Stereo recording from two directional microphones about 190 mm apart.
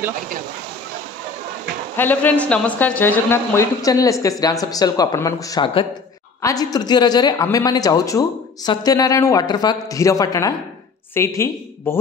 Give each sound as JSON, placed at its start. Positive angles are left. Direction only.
{"t": 2.0, "sound": "a woman's voice", "side_deg": 10}